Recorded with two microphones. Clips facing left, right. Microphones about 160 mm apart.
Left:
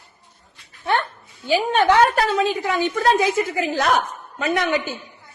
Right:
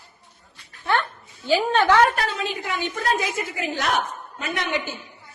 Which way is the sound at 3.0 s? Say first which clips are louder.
Left 7 dB; 30° left (ahead or behind).